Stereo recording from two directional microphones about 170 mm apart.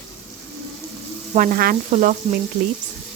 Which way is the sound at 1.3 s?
55° right (ahead or behind).